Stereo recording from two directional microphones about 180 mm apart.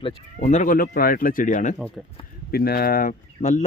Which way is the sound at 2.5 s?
60° left (ahead or behind).